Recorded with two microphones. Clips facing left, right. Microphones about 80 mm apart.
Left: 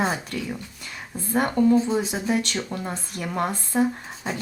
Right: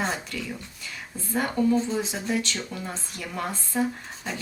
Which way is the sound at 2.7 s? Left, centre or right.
Left.